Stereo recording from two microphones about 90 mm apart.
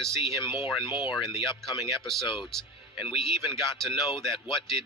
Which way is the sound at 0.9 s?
55° left (ahead or behind).